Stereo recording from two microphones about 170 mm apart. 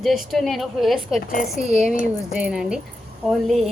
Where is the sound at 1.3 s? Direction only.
55° left (ahead or behind).